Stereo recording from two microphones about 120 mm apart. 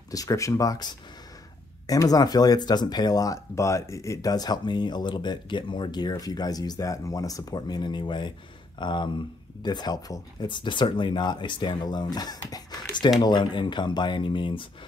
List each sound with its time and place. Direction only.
0.1 s speech: 30° left (ahead or behind); by 14.7 s 45° left (ahead or behind)